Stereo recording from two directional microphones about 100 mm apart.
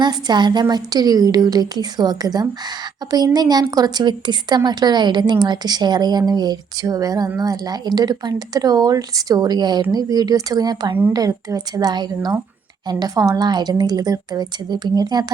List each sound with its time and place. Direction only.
0.0 s a woman's voice: 45° right (ahead or behind)